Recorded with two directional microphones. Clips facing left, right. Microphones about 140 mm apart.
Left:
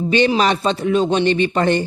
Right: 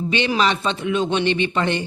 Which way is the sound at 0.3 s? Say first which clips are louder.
Left 3 dB; 40° left (ahead or behind).